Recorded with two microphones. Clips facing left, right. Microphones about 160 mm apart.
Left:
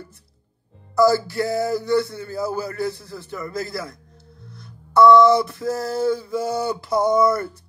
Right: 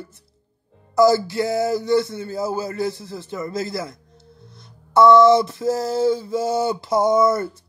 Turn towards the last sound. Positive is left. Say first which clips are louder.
# right 1 dB
turn(degrees=-20)  # may be behind; listen again after turning